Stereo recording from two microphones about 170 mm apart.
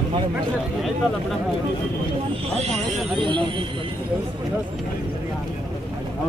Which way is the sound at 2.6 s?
35° right (ahead or behind).